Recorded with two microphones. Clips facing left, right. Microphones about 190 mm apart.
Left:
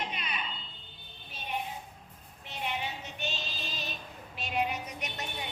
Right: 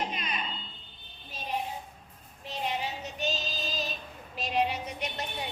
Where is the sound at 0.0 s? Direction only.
40° right (ahead or behind).